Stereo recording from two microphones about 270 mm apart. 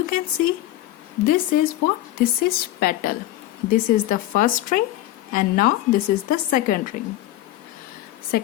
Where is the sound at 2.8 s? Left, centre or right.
Left.